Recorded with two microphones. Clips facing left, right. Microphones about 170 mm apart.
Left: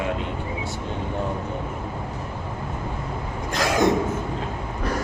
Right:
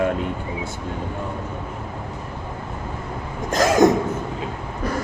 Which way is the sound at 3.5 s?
45° right (ahead or behind).